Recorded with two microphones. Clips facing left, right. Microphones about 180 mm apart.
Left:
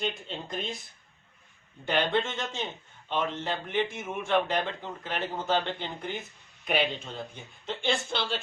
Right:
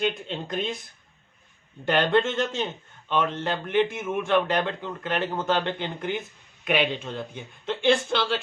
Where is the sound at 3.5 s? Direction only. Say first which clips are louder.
Right 6 dB; 60° right (ahead or behind).